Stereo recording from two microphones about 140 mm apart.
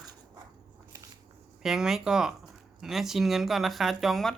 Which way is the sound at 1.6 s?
5° right (ahead or behind).